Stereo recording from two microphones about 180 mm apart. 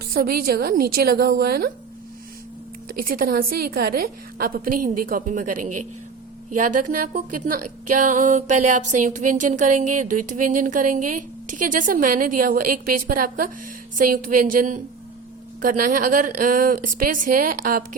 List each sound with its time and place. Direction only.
0.1 s a woman's voice: 55° right (ahead or behind)
3.0 s speech: 55° right (ahead or behind)